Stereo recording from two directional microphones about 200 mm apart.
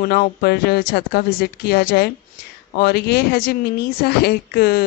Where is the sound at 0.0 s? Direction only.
50° left (ahead or behind).